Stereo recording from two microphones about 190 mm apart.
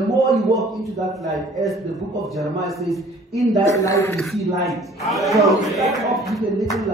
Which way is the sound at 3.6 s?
15° left (ahead or behind).